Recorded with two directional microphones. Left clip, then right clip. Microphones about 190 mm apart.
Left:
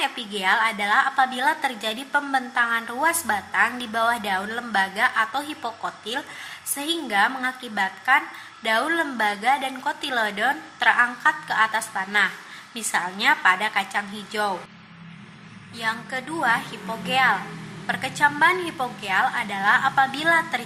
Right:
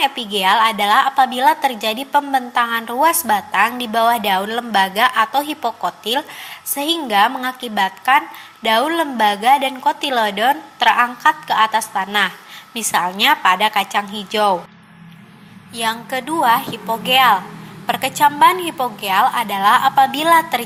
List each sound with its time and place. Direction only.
0.0 s a woman's voice: 20° right (ahead or behind)
15.7 s a woman's voice: 25° right (ahead or behind)